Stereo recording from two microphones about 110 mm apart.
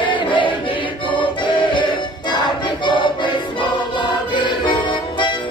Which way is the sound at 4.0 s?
45° left (ahead or behind).